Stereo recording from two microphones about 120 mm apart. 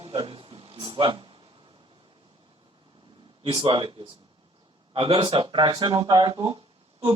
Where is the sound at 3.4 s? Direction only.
45° right (ahead or behind).